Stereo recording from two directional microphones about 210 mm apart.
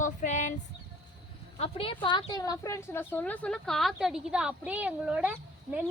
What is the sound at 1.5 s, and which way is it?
A woman's voice, 25° left (ahead or behind).